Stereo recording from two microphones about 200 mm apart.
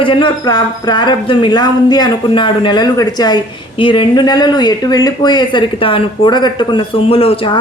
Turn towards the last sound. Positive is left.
turn(degrees=30)  # may be behind; listen again after turning